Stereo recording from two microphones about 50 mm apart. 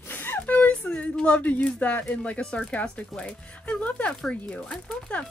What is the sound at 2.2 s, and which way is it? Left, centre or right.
Speech, centre.